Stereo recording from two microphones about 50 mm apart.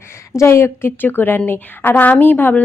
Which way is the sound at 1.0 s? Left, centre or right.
Left.